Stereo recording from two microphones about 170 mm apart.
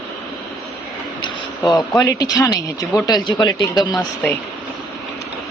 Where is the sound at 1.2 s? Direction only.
20° left (ahead or behind).